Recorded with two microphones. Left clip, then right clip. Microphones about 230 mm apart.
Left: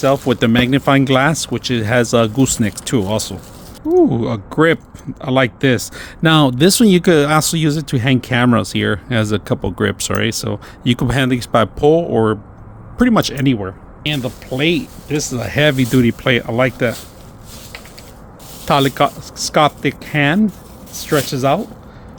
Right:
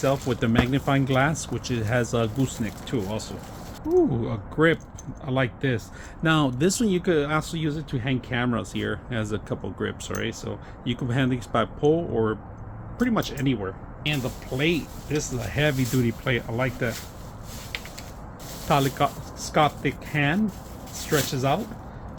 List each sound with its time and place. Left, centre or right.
0.0 s speech: left
18.7 s speech: left